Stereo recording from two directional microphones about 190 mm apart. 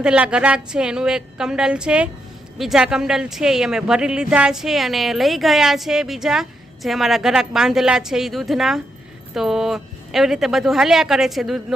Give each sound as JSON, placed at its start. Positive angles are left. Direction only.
{"t": 0.0, "sound": "speech", "side_deg": -5}